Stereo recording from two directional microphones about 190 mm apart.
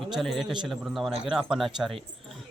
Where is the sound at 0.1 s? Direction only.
Centre (ahead or behind).